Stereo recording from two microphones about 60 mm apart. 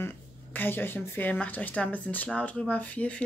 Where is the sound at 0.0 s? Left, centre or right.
Left.